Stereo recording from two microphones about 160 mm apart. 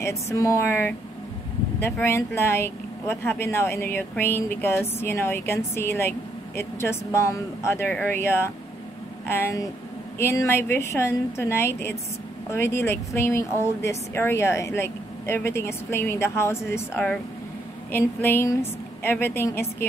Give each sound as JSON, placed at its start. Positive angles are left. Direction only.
{"t": 0.0, "sound": "a woman's voice", "side_deg": 20}